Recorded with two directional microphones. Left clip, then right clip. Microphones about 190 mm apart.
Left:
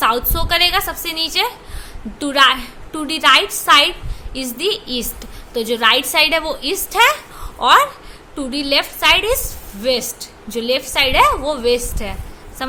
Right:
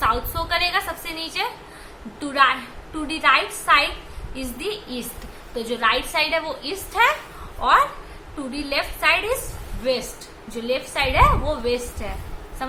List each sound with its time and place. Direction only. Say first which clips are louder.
0.0 s a woman's voice: left 5 dB; 45° left (ahead or behind)